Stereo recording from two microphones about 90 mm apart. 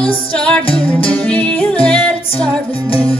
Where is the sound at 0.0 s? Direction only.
10° left (ahead or behind).